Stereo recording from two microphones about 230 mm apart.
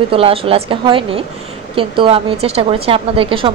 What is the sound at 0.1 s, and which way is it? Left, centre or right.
A woman's voice, right.